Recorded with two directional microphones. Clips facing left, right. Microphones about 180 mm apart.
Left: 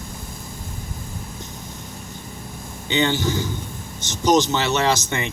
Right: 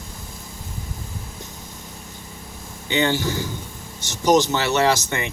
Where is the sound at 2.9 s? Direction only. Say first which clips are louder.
Even; 20° left (ahead or behind).